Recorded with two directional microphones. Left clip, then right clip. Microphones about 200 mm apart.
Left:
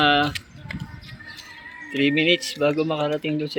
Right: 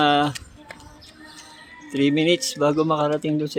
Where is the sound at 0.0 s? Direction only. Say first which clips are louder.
Even; 15° right (ahead or behind).